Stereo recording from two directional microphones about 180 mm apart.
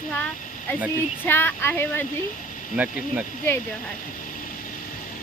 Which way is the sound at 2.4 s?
45° left (ahead or behind).